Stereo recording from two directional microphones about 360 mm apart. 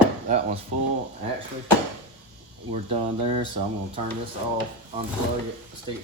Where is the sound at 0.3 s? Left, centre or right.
Centre.